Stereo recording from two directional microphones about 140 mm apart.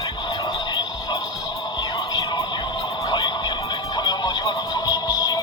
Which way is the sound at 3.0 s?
30° left (ahead or behind).